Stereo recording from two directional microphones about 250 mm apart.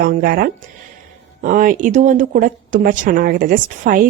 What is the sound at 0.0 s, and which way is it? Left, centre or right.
Speech, right.